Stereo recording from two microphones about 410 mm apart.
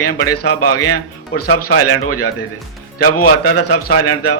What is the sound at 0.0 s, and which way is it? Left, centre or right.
Speech, left.